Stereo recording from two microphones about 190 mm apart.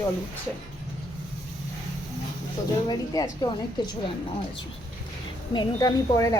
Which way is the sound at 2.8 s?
20° left (ahead or behind).